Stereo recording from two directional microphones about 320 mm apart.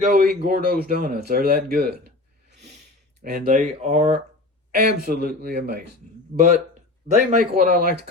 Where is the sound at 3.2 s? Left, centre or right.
Right.